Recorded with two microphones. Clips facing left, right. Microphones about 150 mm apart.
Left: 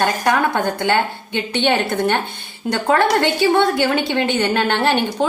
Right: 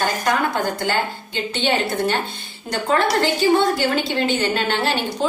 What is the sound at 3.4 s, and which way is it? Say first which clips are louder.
A woman's voice: even; 60° left (ahead or behind).